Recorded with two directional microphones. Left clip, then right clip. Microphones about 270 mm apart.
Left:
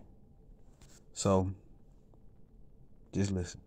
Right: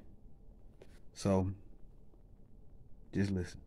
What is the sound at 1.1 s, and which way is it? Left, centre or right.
Speech, centre.